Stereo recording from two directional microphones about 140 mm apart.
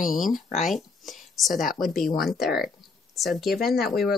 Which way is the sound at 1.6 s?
Centre (ahead or behind).